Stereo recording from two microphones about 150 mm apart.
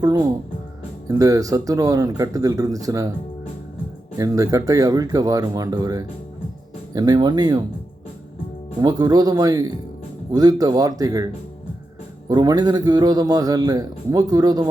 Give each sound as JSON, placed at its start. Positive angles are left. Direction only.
{"t": 0.0, "sound": "a man's voice", "side_deg": -25}
{"t": 4.2, "sound": "a man's voice", "side_deg": -20}
{"t": 8.8, "sound": "a man's voice", "side_deg": -25}
{"t": 12.3, "sound": "a man's voice", "side_deg": -25}